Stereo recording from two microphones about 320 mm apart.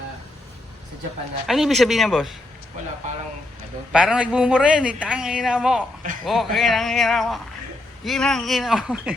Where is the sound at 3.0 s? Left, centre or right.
Right.